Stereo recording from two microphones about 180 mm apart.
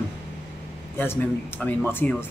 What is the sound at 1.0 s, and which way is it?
Speech, 10° left (ahead or behind).